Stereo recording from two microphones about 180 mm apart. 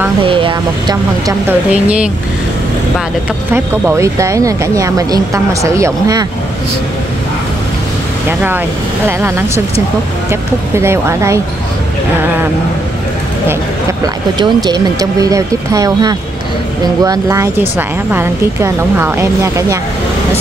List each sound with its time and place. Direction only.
0.2 s speech: 30° right (ahead or behind)
1.5 s speech: 5° right (ahead or behind)
3.5 s speech: 15° right (ahead or behind)
8.3 s speech: 10° right (ahead or behind)
10.3 s speech: 15° right (ahead or behind)
14.0 s speech: 20° right (ahead or behind)